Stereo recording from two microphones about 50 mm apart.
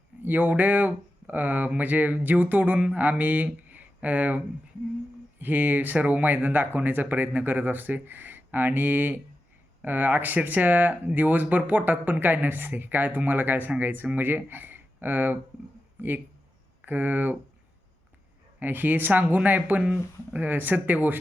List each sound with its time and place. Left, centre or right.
0.2 s speech: right
5.4 s speech: right
18.6 s speech: right
19.8 s speech: right
20.4 s speech: right